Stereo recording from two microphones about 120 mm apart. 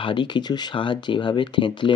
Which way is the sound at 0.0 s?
40° left (ahead or behind).